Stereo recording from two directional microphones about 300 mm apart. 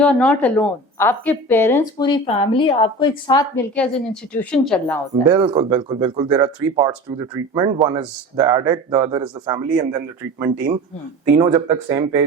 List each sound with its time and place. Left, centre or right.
0.0 s a woman's voice: centre
5.3 s speech: centre
11.3 s speech: centre